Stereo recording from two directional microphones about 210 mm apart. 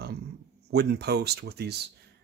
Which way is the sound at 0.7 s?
50° right (ahead or behind).